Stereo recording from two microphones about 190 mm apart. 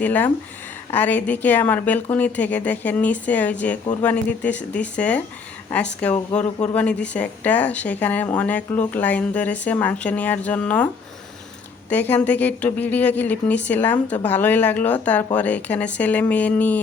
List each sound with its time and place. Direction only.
0.0 s a woman's voice: 10° left (ahead or behind)
11.9 s a woman's voice: 10° left (ahead or behind)